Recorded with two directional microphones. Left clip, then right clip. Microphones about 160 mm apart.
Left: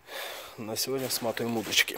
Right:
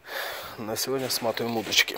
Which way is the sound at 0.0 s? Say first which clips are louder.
Right 5 dB; 10° left (ahead or behind).